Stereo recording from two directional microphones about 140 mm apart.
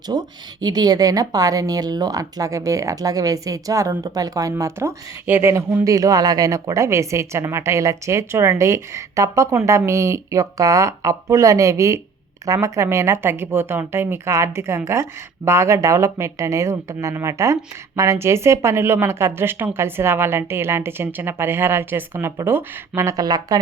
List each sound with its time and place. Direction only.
0.1 s a woman's voice: 30° right (ahead or behind)